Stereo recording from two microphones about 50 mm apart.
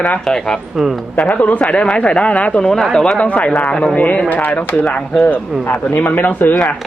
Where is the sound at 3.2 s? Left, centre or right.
Left.